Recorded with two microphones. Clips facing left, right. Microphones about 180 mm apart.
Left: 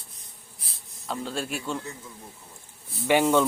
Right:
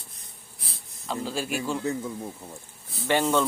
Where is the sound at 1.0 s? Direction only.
Centre (ahead or behind).